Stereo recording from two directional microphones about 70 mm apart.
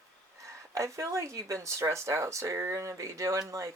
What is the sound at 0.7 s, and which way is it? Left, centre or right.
Speech, right.